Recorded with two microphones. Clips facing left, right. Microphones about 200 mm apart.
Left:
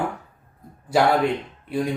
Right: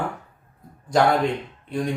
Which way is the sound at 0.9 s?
5° left (ahead or behind).